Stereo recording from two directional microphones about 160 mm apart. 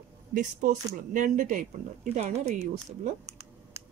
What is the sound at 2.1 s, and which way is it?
Speech, 45° right (ahead or behind).